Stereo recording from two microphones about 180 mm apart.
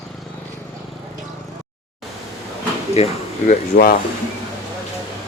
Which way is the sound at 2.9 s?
35° left (ahead or behind).